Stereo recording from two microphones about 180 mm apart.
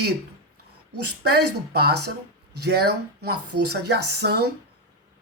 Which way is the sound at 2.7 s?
65° right (ahead or behind).